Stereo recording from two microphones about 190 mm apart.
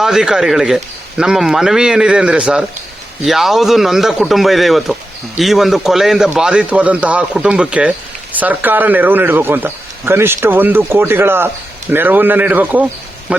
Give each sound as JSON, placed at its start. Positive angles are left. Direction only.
{"t": 0.0, "sound": "a man's voice", "side_deg": -5}